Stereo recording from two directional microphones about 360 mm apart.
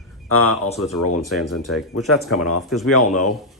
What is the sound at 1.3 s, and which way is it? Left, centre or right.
Speech, centre.